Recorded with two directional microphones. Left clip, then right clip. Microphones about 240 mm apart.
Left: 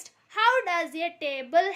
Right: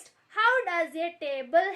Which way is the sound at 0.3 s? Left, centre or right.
Left.